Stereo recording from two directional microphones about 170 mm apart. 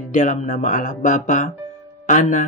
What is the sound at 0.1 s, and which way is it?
Speech, 45° left (ahead or behind).